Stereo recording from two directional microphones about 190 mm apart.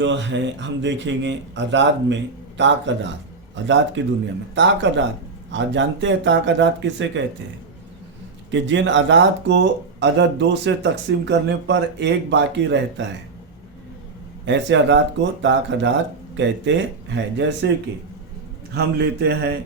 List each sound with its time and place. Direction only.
0.0 s speech: 70° right (ahead or behind)
8.4 s speech: 70° right (ahead or behind)
14.4 s speech: 75° right (ahead or behind)
18.7 s speech: 60° right (ahead or behind)